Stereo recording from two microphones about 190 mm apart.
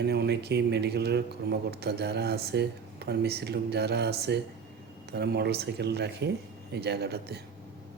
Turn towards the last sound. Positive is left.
turn(degrees=-60)  # may be behind; listen again after turning